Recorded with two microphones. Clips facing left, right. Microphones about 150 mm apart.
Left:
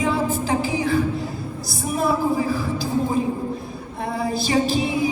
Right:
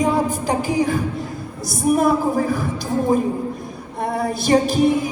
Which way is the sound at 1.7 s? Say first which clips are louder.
Right 6 dB; 45° right (ahead or behind).